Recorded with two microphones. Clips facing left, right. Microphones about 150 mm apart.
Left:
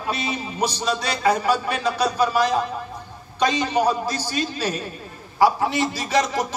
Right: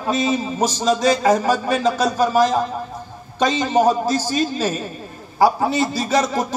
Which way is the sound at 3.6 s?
45° right (ahead or behind).